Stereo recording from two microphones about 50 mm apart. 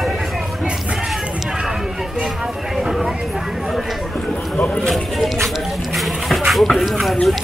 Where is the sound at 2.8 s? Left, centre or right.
Centre.